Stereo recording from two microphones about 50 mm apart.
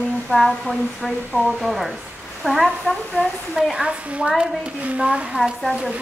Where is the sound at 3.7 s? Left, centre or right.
Centre.